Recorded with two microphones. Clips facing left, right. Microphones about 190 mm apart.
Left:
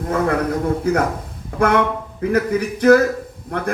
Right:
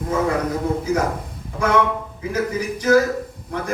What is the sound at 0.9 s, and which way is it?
A man's voice, 60° left (ahead or behind).